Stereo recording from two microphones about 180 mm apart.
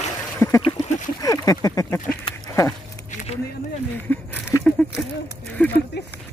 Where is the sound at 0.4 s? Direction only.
10° left (ahead or behind).